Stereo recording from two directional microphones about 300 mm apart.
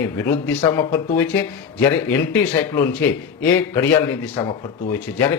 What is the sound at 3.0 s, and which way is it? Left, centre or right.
Speech, centre.